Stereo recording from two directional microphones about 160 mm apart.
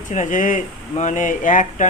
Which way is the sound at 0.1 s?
50° left (ahead or behind).